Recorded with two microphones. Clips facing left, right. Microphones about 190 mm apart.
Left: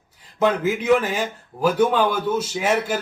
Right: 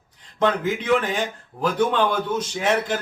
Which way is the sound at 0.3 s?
5° left (ahead or behind).